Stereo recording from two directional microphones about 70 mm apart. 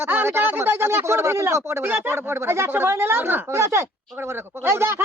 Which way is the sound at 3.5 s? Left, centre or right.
Right.